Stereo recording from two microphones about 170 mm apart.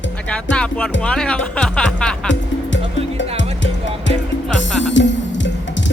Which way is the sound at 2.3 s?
90° left.